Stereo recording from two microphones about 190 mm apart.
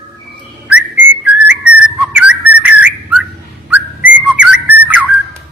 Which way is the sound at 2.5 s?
10° right (ahead or behind).